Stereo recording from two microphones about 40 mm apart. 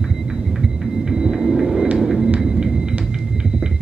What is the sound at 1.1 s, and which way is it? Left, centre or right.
Hum, centre.